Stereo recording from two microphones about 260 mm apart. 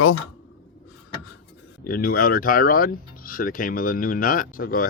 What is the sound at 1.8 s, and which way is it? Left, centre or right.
Speech, left.